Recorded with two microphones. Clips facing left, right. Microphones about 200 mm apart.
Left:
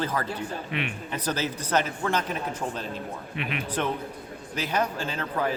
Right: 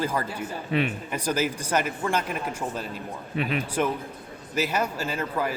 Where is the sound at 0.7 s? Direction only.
35° right (ahead or behind).